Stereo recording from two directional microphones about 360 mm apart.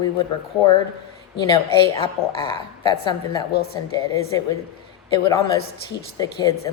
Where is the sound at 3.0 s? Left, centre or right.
Centre.